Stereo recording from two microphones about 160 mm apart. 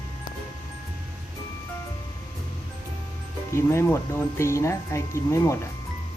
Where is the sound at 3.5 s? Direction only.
15° left (ahead or behind).